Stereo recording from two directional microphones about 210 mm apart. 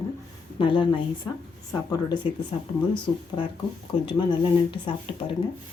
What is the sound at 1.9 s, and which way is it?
Speech, 20° left (ahead or behind).